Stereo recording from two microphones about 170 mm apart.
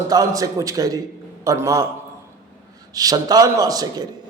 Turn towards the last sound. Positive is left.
turn(degrees=-20)  # may be behind; listen again after turning